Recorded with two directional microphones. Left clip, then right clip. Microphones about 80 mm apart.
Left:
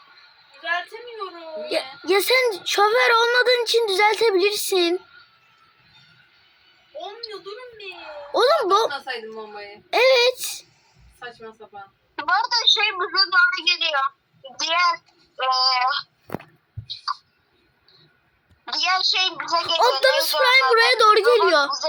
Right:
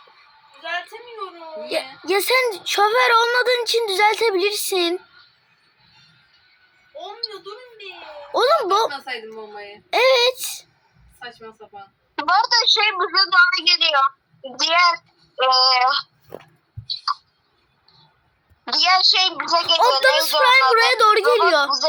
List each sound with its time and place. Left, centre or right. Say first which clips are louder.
0.6 s a woman's voice: left 2 dB; centre
1.6 s a child's voice: even; centre
6.9 s a sound: right 3 dB; centre
8.0 s a woman's voice: even; centre
12.1 s a woman's voice: right 4 dB; right
17.1 s clicking: right 3 dB; right
18.6 s a woman's voice: right 5 dB; right
20.0 s a child's voice: right 3 dB; centre